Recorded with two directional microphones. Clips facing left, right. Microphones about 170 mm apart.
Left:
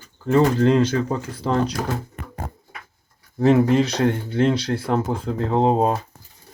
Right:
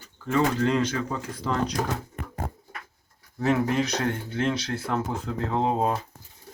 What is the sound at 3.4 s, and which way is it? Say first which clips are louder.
Speech: left 7 dB; 30° left (ahead or behind).